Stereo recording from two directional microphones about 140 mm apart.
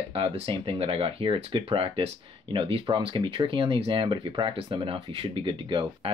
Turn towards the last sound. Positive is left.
turn(degrees=-35)  # may be behind; listen again after turning